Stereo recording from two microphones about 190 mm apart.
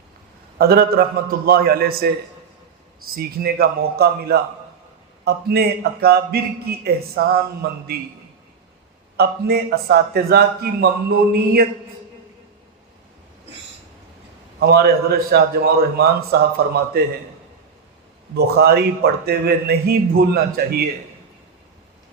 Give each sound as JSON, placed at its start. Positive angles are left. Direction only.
{"t": 0.6, "sound": "a man's voice", "side_deg": -55}
{"t": 3.2, "sound": "a man's voice", "side_deg": -55}
{"t": 9.1, "sound": "a man's voice", "side_deg": -60}
{"t": 14.6, "sound": "a man's voice", "side_deg": -55}
{"t": 18.3, "sound": "a man's voice", "side_deg": -55}